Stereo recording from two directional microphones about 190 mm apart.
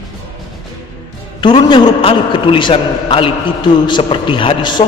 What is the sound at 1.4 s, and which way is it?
A man's voice, 25° left (ahead or behind).